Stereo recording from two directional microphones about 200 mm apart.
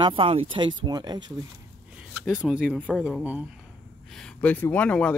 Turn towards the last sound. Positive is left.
turn(degrees=5)  # may be behind; listen again after turning